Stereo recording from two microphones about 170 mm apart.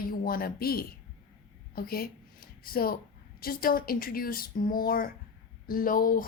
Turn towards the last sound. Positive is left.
turn(degrees=55)  # may be behind; listen again after turning